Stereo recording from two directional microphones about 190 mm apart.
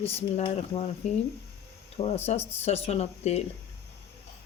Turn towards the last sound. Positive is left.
turn(degrees=35)  # may be behind; listen again after turning